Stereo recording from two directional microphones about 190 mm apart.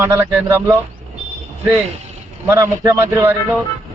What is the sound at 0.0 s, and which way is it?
Speech, 15° right (ahead or behind).